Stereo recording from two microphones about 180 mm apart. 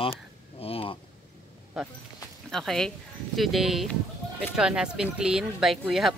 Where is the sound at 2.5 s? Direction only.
Centre (ahead or behind).